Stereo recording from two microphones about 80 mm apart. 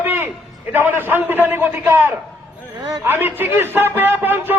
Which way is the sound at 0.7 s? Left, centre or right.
Right.